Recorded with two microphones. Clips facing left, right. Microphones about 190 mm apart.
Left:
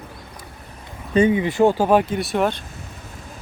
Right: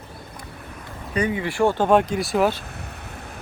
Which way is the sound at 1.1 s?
20° left (ahead or behind).